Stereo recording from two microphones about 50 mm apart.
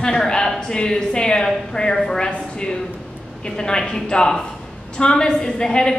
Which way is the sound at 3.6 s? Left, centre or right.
Centre.